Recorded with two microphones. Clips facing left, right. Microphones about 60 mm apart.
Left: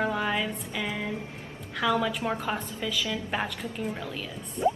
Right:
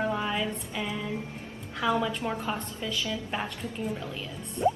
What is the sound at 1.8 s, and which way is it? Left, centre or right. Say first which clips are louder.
Speech: left 1 dB; centre.